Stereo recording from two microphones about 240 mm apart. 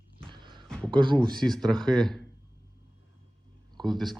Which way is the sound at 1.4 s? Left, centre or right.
Centre.